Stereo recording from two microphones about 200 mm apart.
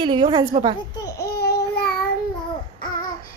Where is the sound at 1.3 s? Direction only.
55° left (ahead or behind).